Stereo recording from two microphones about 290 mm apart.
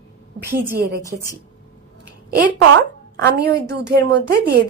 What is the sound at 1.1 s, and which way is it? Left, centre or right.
Speech, right.